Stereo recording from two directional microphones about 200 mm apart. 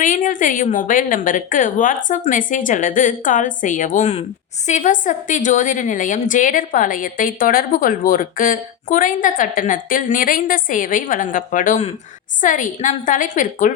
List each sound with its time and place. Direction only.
0.0 s a woman's voice: 40° left (ahead or behind)